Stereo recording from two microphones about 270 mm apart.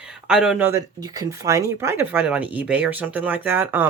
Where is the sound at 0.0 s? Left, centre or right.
Centre.